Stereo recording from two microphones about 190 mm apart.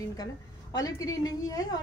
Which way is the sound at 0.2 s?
20° left (ahead or behind).